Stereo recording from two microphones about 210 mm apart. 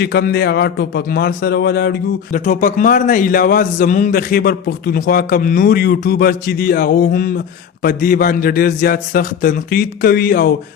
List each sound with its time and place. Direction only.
0.0 s a man's voice: 50° left (ahead or behind)
2.4 s a man's voice: 35° left (ahead or behind)